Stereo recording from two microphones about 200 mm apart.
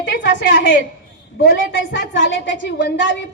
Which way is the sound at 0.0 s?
60° left (ahead or behind).